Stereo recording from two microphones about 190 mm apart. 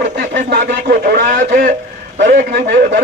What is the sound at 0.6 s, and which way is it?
A man's voice, 45° right (ahead or behind).